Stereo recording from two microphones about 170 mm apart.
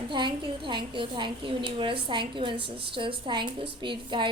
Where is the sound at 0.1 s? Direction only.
30° right (ahead or behind).